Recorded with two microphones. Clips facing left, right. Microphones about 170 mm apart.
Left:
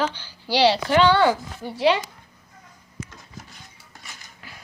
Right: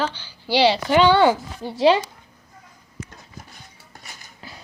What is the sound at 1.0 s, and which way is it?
Speech, 20° right (ahead or behind).